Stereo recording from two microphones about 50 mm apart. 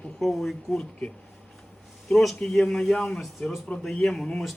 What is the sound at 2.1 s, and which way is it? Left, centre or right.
A man's voice, centre.